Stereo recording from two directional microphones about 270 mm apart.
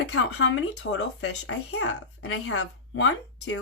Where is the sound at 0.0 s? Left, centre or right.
Left.